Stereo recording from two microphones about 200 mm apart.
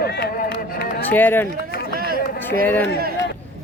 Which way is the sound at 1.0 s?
10° left (ahead or behind).